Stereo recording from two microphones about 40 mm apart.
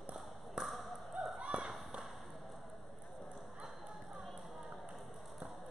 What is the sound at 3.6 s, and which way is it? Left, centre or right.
Basketball bounce, centre.